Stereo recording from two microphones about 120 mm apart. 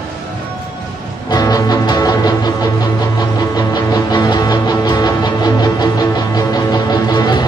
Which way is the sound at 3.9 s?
35° left (ahead or behind).